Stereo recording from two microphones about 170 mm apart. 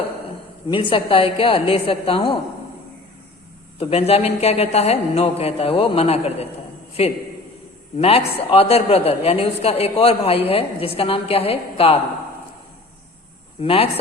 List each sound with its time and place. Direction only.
0.7 s a woman's voice: 30° left (ahead or behind)
3.8 s a woman's voice: 35° left (ahead or behind)
7.9 s a woman's voice: 35° left (ahead or behind)
13.6 s a woman's voice: 35° left (ahead or behind)